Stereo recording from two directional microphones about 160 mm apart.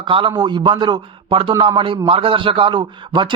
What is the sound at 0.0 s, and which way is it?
Speech, 30° right (ahead or behind).